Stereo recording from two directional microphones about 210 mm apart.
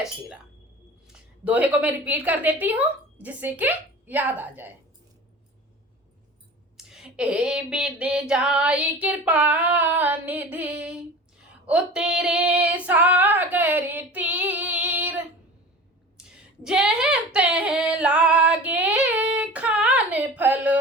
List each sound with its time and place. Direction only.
1.0 s a woman's voice: 5° right (ahead or behind)
6.7 s a sound: 5° right (ahead or behind)
11.6 s female singing: 5° right (ahead or behind)